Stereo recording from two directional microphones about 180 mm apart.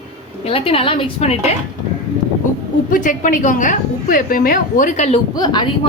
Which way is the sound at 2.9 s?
45° left (ahead or behind).